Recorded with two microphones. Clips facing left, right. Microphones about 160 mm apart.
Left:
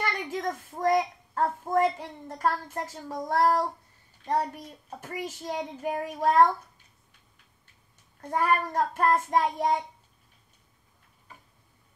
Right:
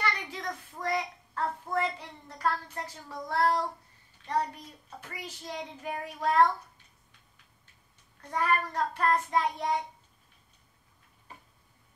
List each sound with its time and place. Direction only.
0.0 s a child's voice: 45° left (ahead or behind)
8.2 s a child's voice: 45° left (ahead or behind)